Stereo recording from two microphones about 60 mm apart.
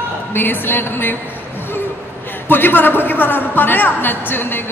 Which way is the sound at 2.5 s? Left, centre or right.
Left.